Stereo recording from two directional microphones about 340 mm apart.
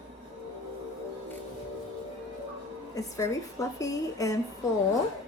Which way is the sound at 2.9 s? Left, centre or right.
Centre.